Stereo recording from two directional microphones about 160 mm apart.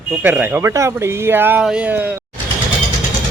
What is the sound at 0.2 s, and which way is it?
Speech, 10° right (ahead or behind).